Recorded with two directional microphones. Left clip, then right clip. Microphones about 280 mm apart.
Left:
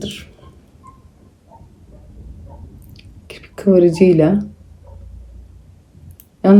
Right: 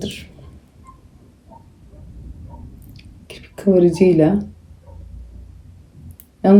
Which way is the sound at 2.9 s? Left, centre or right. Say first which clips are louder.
Left 2 dB; centre.